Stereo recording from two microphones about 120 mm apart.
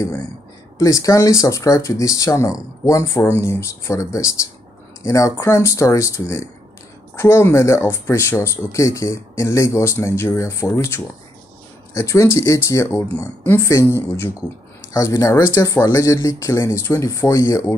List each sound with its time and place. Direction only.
0.7 s speech: 30° left (ahead or behind)